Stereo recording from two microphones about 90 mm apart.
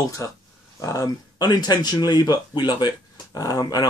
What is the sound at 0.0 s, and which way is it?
Speech, 35° left (ahead or behind).